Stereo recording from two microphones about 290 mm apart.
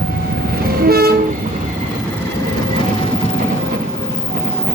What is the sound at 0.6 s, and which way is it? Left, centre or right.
Train, right.